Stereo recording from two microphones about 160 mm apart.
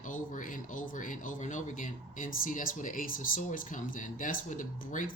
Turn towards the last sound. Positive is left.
turn(degrees=55)  # may be behind; listen again after turning